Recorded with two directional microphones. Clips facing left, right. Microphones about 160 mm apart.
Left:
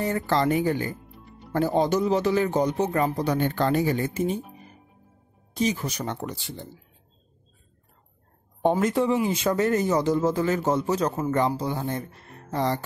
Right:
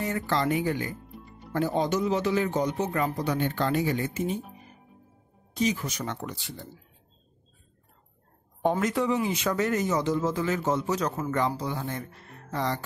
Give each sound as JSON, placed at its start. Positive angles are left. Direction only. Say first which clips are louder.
{"t": 0.0, "sound": "speech", "louder": "left 4 dB", "side_deg": 35}
{"t": 5.6, "sound": "speech", "louder": "left 2 dB", "side_deg": 30}
{"t": 8.6, "sound": "speech", "louder": "left 3 dB", "side_deg": 30}